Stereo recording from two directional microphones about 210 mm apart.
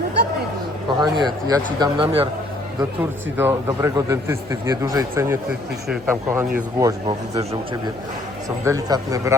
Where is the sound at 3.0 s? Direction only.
10° right (ahead or behind).